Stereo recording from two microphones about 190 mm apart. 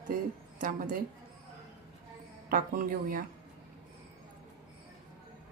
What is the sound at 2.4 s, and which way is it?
Speech, 45° right (ahead or behind).